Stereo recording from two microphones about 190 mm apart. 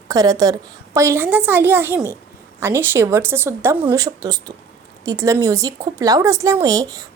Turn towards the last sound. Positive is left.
turn(degrees=-20)  # may be behind; listen again after turning